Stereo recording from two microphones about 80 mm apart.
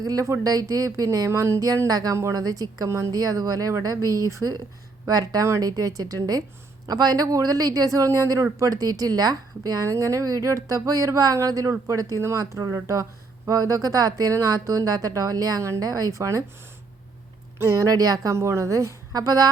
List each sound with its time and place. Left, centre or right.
0.0 s speech: right
1.3 s a sound: right
2.3 s speech: right
17.6 s speech: right